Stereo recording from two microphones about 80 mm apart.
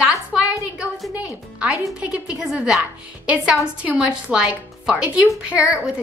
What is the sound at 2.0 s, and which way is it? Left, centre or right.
Speech, centre.